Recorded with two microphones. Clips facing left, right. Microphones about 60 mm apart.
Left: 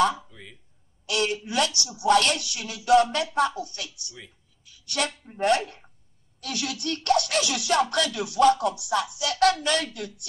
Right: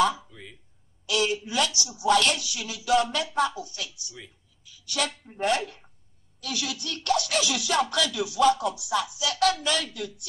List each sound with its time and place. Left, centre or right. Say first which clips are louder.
0.1 s a sound: left 2 dB; centre
1.0 s speech: even; left
5.4 s speech: left 3 dB; left